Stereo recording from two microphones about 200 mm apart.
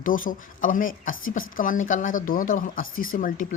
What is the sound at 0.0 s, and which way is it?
Speech, 45° left (ahead or behind).